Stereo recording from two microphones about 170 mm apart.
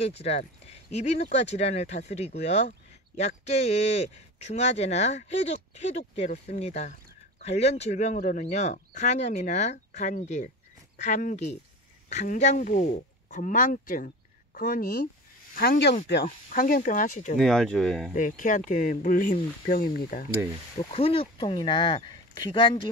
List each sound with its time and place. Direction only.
0.0 s speech: 40° left (ahead or behind); by 16.0 s 75° left (ahead or behind)
16.3 s speech: 50° left (ahead or behind)
17.4 s speech: 5° left (ahead or behind)
18.1 s speech: 50° left (ahead or behind)
20.7 s speech: 35° left (ahead or behind)